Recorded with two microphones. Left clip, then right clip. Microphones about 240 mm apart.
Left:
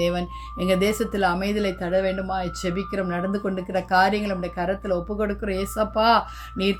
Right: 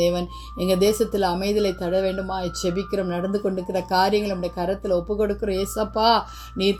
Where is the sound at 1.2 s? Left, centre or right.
Left.